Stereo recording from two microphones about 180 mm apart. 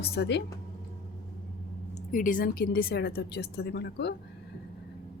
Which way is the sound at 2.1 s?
50° left (ahead or behind).